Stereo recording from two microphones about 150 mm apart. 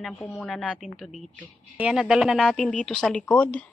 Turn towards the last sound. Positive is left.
turn(degrees=10)  # may be behind; listen again after turning